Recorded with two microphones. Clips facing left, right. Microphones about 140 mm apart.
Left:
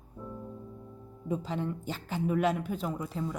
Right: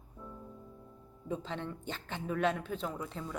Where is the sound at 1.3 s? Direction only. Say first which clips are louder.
Left 5 dB; 10° left (ahead or behind).